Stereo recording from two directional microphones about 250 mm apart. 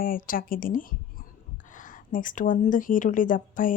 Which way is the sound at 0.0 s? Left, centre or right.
Left.